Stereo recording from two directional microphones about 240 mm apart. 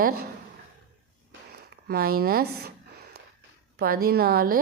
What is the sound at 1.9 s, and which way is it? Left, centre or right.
A woman's voice, right.